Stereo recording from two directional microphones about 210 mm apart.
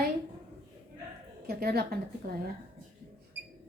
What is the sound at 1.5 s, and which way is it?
Speech, 45° right (ahead or behind).